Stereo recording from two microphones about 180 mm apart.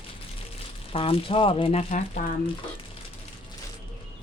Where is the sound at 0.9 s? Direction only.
30° left (ahead or behind).